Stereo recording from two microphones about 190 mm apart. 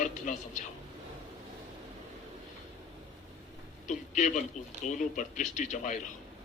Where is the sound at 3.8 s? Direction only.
40° left (ahead or behind).